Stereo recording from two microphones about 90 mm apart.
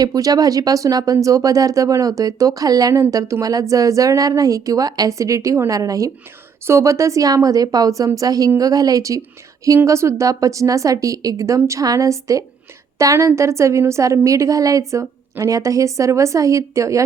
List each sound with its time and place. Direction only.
0.0 s a woman's voice: 45° right (ahead or behind)